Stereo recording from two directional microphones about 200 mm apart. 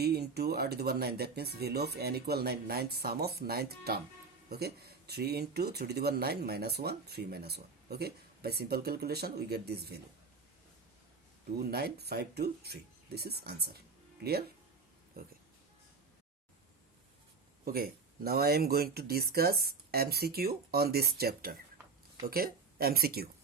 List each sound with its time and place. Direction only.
0.0 s speech: 55° right (ahead or behind)
11.7 s speech: 50° right (ahead or behind)
15.2 s speech: 50° right (ahead or behind)
17.7 s speech: 50° right (ahead or behind)